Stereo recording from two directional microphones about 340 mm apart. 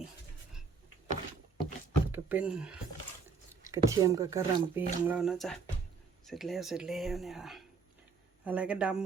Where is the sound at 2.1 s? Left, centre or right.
Centre.